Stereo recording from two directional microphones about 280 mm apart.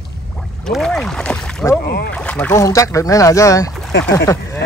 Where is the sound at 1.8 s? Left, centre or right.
Left.